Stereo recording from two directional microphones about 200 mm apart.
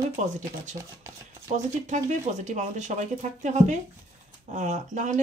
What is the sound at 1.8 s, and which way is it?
Speech, 35° right (ahead or behind).